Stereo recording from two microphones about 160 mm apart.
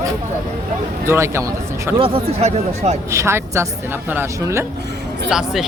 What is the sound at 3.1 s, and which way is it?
A woman's voice, 15° right (ahead or behind).